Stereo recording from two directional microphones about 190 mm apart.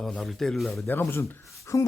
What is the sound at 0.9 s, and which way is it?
Speech, 10° left (ahead or behind).